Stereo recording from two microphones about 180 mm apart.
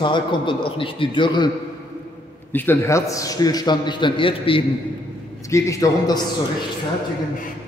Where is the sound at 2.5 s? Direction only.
10° left (ahead or behind); by 4.6 s 30° left (ahead or behind).